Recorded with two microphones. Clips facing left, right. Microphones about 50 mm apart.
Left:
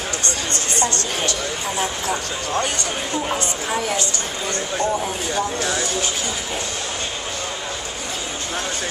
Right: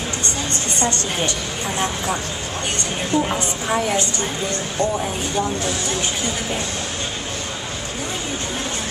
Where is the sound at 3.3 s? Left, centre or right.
Centre.